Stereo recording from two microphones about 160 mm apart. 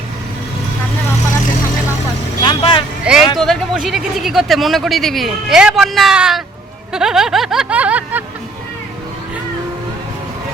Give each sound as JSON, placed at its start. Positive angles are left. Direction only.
{"t": 2.4, "sound": "vehicle", "side_deg": 35}
{"t": 3.0, "sound": "speech", "side_deg": -5}